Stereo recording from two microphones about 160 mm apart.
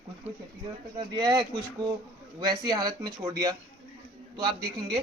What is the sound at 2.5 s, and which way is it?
Speech, 25° right (ahead or behind).